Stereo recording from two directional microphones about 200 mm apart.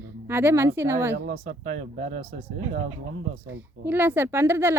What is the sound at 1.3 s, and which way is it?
Speech, 35° right (ahead or behind).